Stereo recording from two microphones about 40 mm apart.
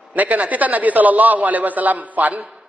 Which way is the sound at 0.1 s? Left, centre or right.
Right.